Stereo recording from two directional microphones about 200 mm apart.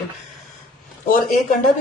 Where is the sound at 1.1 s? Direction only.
40° left (ahead or behind).